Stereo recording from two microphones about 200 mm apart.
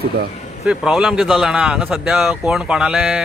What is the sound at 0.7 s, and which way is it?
A man's voice, 5° right (ahead or behind).